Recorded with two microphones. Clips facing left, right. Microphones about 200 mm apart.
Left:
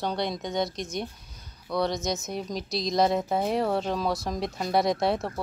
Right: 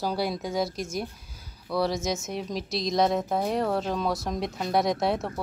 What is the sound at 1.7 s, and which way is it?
A woman's voice, 5° right (ahead or behind).